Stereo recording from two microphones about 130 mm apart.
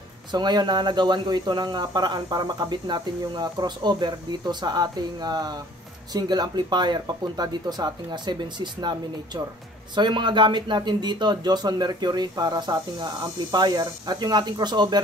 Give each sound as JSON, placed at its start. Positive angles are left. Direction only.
{"t": 0.3, "sound": "speech", "side_deg": -35}